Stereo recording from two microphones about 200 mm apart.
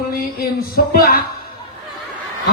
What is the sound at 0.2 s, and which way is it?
A man's voice, 50° left (ahead or behind).